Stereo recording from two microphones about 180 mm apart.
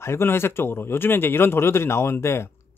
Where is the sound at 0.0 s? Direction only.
15° left (ahead or behind).